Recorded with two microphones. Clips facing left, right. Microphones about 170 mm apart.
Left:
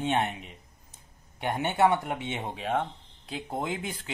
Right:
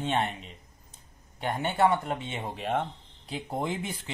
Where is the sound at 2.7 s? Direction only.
10° right (ahead or behind).